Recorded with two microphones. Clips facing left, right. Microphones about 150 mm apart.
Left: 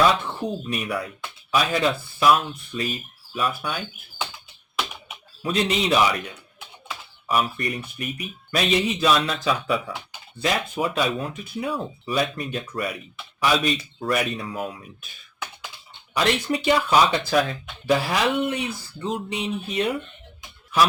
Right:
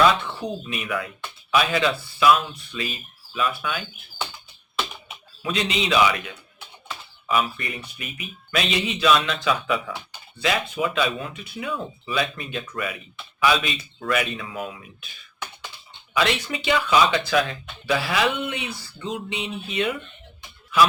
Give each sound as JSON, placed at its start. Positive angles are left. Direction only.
{"t": 0.7, "sound": "speech", "side_deg": 40}
{"t": 5.4, "sound": "speech", "side_deg": 45}
{"t": 16.1, "sound": "speech", "side_deg": 45}